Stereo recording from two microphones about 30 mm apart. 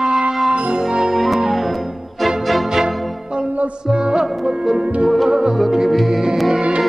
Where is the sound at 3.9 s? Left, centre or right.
Right.